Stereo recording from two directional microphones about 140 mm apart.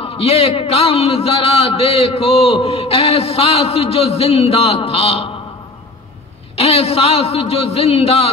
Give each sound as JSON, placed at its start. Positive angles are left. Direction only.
{"t": 0.0, "sound": "a man's voice", "side_deg": 45}
{"t": 6.5, "sound": "a man's voice", "side_deg": 45}